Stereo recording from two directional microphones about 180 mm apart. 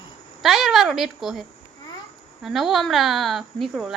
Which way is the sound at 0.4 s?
Centre (ahead or behind).